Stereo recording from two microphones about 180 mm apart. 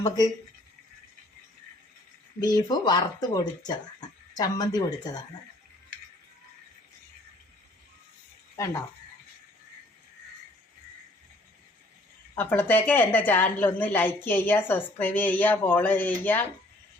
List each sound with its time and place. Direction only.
2.4 s speech: 20° left (ahead or behind)
8.5 s speech: 15° left (ahead or behind)
12.4 s a woman's voice: 10° left (ahead or behind)